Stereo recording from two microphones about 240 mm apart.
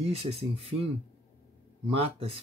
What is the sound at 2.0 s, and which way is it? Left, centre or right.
Speech, right.